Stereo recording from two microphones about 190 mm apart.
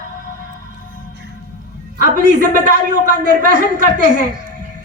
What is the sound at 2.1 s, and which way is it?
A man's voice, 45° right (ahead or behind).